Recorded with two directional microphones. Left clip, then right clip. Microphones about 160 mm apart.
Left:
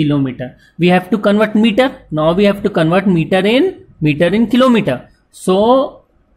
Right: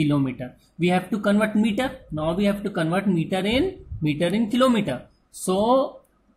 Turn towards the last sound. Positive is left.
turn(degrees=20)  # may be behind; listen again after turning